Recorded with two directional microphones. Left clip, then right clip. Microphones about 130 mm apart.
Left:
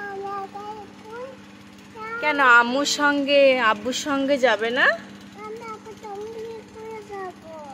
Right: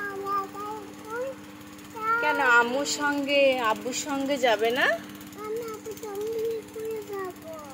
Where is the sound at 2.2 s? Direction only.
90° left; by 4.9 s 45° left (ahead or behind).